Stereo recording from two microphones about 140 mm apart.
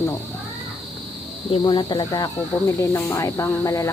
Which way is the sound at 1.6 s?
35° left (ahead or behind).